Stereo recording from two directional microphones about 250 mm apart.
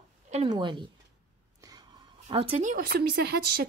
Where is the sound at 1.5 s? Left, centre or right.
Centre.